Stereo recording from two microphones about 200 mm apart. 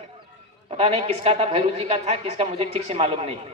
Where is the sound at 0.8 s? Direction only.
30° right (ahead or behind).